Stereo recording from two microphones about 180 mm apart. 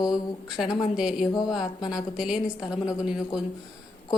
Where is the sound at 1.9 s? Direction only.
5° right (ahead or behind).